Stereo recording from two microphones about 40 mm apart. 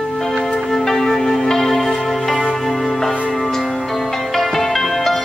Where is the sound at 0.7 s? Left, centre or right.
Centre.